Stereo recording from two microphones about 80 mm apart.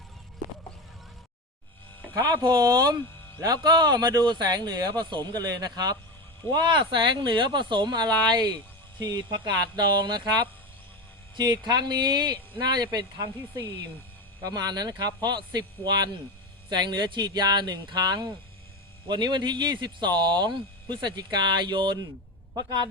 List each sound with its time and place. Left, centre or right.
2.1 s speech: right
2.6 s speech: right
6.5 s speech: right
14.4 s speech: right